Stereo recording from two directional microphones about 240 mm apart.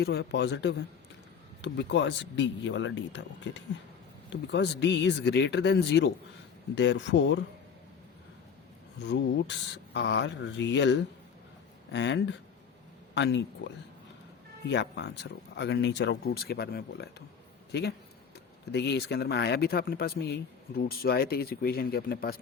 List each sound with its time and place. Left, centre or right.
0.0 s speech: left
9.0 s speech: left